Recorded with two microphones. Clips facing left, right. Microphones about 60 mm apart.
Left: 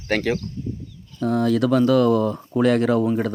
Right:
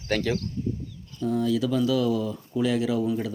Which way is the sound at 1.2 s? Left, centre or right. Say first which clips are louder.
Left 5 dB; left.